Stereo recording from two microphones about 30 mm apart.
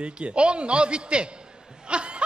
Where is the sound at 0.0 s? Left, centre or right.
Right.